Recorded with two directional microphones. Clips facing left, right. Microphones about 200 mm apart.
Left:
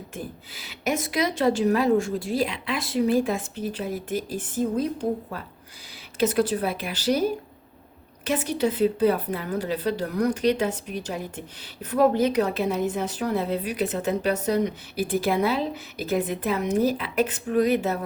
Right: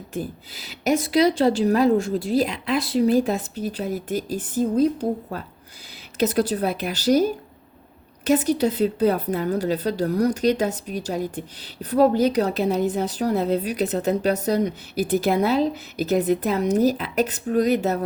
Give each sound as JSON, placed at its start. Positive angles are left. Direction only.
{"t": 0.1, "sound": "a woman's voice", "side_deg": -40}